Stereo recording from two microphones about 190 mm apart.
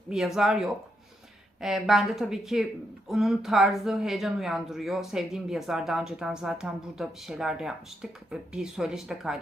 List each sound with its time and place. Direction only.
0.3 s speech: centre (ahead or behind)